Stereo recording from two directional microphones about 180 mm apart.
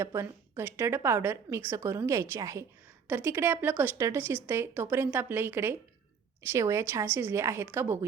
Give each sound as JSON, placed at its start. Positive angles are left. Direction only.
{"t": 0.0, "sound": "a woman's voice", "side_deg": -15}